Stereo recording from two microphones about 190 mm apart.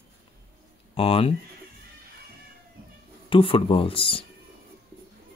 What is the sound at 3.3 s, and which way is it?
Speech, 30° left (ahead or behind).